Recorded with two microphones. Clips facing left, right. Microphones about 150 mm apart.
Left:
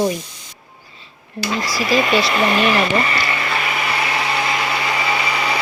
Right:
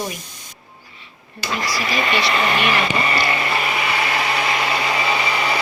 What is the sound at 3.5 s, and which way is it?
Vehicle, 5° right (ahead or behind).